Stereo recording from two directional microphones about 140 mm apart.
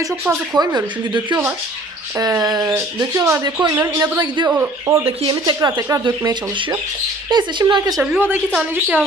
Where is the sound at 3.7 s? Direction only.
15° right (ahead or behind).